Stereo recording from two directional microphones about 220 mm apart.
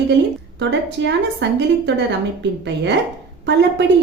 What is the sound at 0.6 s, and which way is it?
A woman's voice, 50° right (ahead or behind).